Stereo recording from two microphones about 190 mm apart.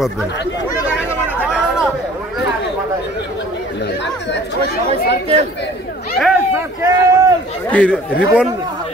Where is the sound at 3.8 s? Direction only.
65° left (ahead or behind).